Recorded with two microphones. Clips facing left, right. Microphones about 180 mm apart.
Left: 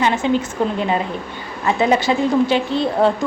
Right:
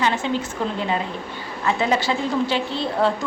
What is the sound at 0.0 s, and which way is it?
Speech, 15° left (ahead or behind).